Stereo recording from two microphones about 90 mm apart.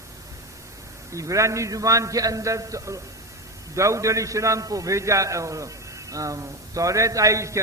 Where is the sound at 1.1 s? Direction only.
35° right (ahead or behind).